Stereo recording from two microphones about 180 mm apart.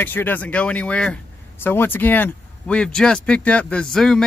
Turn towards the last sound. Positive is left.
turn(degrees=5)  # may be behind; listen again after turning